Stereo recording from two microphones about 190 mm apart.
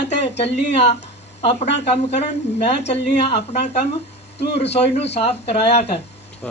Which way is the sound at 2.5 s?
35° left (ahead or behind).